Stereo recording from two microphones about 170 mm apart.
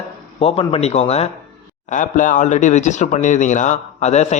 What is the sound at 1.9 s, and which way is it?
A man's voice, 50° left (ahead or behind).